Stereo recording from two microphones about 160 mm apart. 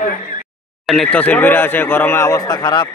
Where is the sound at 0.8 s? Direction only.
Centre (ahead or behind).